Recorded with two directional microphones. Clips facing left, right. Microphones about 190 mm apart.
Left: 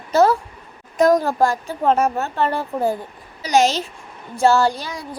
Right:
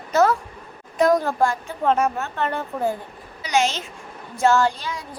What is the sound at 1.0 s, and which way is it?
Speech, 40° left (ahead or behind).